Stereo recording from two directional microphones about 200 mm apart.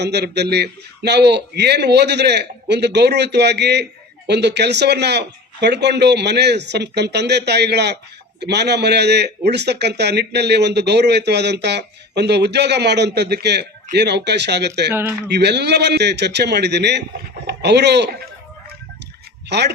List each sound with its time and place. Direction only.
0.0 s a man's voice: 55° right (ahead or behind)
14.9 s speech: 10° right (ahead or behind)
15.3 s a man's voice: 55° right (ahead or behind)
19.5 s a man's voice: 55° right (ahead or behind)